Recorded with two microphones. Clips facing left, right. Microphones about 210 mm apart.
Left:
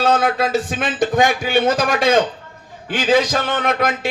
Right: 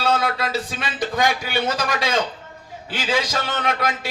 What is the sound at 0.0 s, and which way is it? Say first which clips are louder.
Speech: left 5 dB; 50° left (ahead or behind).